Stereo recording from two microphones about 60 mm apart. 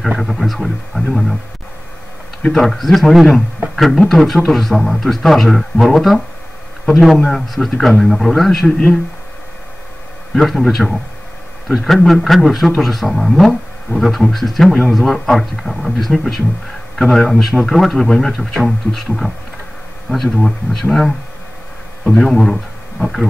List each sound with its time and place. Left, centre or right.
0.2 s speech: centre
2.5 s speech: centre
10.3 s speech: centre
20.4 s speech: centre
22.3 s speech: centre